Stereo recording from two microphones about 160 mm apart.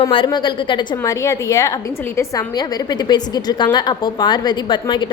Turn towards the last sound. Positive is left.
turn(degrees=30)  # may be behind; listen again after turning